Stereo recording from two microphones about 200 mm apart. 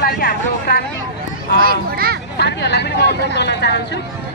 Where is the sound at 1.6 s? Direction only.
50° right (ahead or behind).